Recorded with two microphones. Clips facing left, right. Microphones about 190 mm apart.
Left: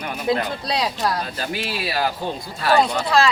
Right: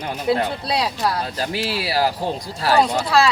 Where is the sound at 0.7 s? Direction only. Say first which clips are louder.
Left 1 dB; 5° right (ahead or behind).